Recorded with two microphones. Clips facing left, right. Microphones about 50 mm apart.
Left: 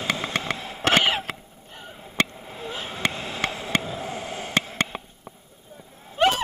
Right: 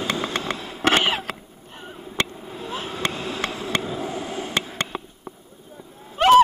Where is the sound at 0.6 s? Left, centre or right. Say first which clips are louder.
Right 1 dB; left.